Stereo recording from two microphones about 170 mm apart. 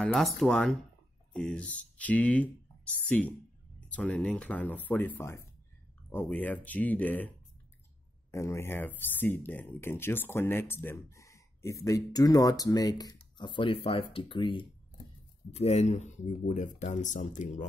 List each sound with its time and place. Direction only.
0.0 s speech: centre (ahead or behind); by 14.7 s 30° left (ahead or behind)
15.5 s speech: 40° left (ahead or behind)